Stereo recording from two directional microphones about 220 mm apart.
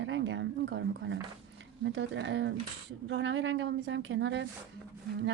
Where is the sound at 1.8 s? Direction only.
55° right (ahead or behind).